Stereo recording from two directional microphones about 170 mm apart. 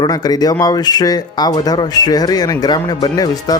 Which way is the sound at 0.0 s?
20° left (ahead or behind).